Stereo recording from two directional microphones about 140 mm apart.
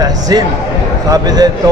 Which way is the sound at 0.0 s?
25° right (ahead or behind).